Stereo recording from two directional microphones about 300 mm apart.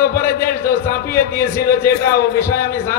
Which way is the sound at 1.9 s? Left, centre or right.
Left.